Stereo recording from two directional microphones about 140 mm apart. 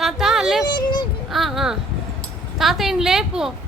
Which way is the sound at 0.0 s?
Centre (ahead or behind).